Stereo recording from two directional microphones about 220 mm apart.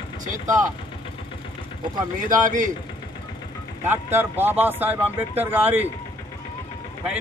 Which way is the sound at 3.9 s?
10° right (ahead or behind).